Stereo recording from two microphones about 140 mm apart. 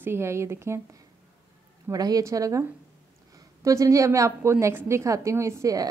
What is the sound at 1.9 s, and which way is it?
A woman's voice, 25° right (ahead or behind).